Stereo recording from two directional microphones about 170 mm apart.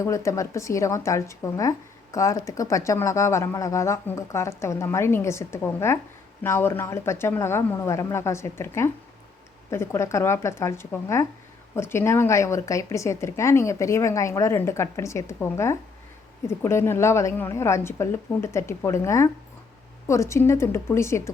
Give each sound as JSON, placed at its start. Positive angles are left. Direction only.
{"t": 0.0, "sound": "a woman's voice", "side_deg": 15}